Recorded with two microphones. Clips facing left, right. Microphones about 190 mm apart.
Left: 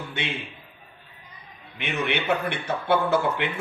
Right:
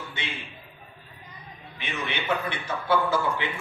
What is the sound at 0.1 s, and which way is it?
Speech, 65° left (ahead or behind).